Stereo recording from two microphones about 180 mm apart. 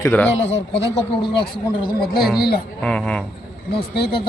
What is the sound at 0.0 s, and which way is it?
Speech, 10° left (ahead or behind).